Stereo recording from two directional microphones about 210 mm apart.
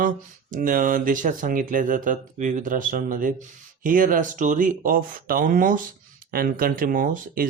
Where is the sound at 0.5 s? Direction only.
40° right (ahead or behind).